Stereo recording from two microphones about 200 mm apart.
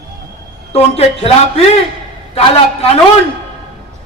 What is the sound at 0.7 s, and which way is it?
Speech, 30° left (ahead or behind).